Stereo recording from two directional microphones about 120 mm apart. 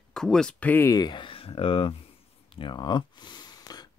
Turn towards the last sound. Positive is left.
turn(degrees=35)  # may be behind; listen again after turning